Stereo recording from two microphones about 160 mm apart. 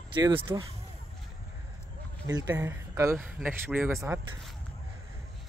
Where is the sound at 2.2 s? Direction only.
20° right (ahead or behind).